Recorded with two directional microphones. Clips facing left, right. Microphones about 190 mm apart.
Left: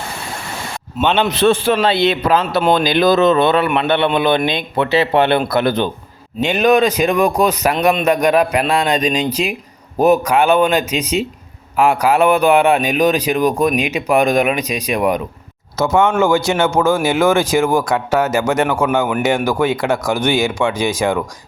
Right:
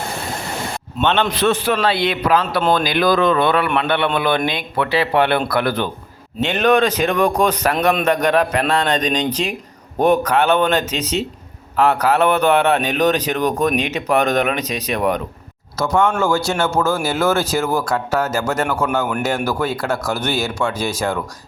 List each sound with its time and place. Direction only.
0.9 s a man's voice: 10° left (ahead or behind)
1.3 s a man's voice: 30° left (ahead or behind)
6.4 s a man's voice: 10° left (ahead or behind)
15.8 s a man's voice: 25° left (ahead or behind)
18.2 s a man's voice: centre (ahead or behind)
19.5 s a man's voice: 15° left (ahead or behind)